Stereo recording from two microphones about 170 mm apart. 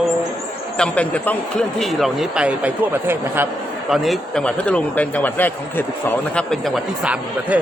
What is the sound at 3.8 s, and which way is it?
Speech, centre (ahead or behind).